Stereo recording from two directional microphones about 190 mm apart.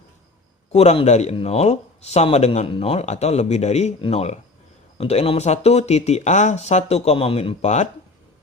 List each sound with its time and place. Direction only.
0.7 s speech: 35° left (ahead or behind)